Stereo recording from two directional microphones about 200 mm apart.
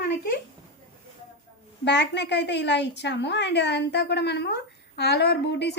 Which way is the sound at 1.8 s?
60° left (ahead or behind).